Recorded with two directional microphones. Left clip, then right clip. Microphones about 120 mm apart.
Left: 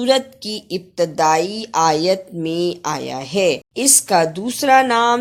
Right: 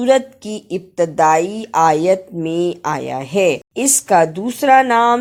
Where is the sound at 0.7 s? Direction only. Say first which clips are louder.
Right 2 dB; 35° right (ahead or behind).